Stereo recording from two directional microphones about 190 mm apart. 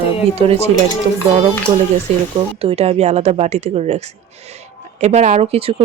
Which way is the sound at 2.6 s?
30° right (ahead or behind).